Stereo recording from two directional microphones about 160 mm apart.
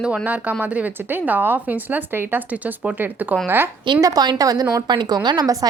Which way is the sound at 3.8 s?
25° right (ahead or behind).